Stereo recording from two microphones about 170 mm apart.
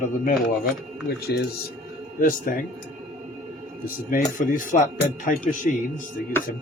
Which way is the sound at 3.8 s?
55° left (ahead or behind).